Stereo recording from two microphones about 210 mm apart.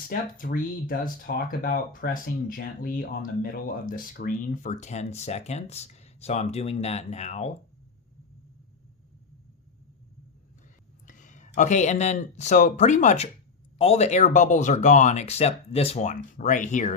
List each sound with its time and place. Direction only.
0.1 s speech: 40° left (ahead or behind)
11.0 s speech: 35° left (ahead or behind)